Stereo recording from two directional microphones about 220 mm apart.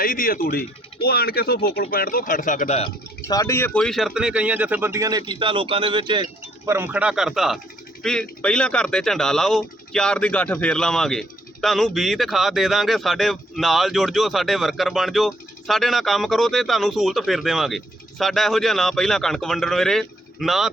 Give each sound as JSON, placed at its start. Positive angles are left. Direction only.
{"t": 0.0, "sound": "speech", "side_deg": 40}
{"t": 3.2, "sound": "speech", "side_deg": 15}
{"t": 6.7, "sound": "speech", "side_deg": -10}